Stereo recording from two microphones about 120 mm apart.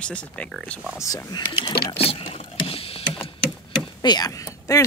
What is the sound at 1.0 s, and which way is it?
Speech, 30° left (ahead or behind).